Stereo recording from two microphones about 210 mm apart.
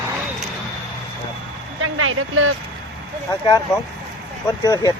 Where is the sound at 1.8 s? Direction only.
85° right.